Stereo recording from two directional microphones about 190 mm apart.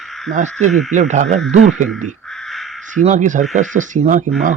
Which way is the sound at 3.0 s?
40° right (ahead or behind).